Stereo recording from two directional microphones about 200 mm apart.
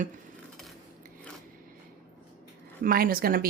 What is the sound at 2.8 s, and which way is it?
Speech, 45° right (ahead or behind).